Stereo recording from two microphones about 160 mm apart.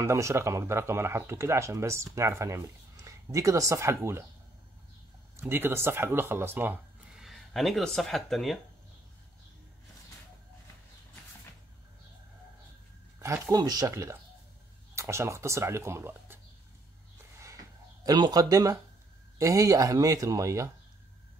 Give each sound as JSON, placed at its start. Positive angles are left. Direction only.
{"t": 0.0, "sound": "speech", "side_deg": -15}
{"t": 5.4, "sound": "speech", "side_deg": -15}
{"t": 7.2, "sound": "speech", "side_deg": 0}
{"t": 13.2, "sound": "speech", "side_deg": -20}
{"t": 18.0, "sound": "speech", "side_deg": -25}